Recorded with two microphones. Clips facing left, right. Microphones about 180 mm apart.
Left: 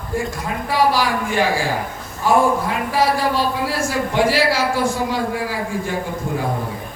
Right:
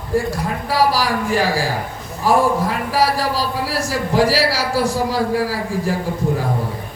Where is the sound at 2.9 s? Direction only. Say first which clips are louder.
Left 1 dB; 35° right (ahead or behind).